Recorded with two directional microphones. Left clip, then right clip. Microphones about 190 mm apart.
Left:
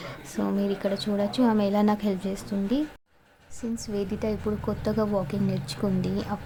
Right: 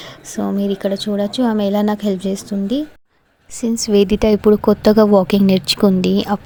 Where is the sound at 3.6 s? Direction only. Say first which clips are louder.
Right 16 dB; 45° right (ahead or behind).